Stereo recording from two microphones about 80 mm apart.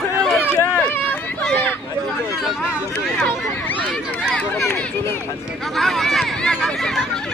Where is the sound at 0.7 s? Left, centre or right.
Centre.